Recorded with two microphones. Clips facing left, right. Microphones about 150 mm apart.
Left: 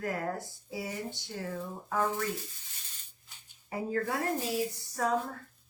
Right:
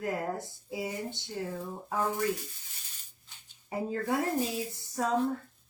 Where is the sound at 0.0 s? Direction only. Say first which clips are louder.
Right 1 dB; 20° right (ahead or behind).